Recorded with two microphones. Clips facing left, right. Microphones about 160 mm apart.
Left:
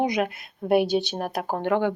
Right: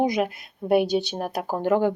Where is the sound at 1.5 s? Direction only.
40° right (ahead or behind).